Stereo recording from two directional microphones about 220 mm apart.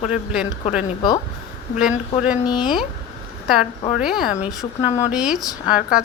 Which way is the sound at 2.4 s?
20° left (ahead or behind).